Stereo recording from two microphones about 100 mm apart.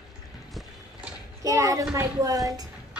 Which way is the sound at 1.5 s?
35° right (ahead or behind).